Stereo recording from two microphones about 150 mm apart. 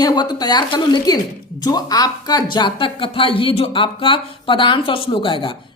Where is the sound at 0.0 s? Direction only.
25° left (ahead or behind).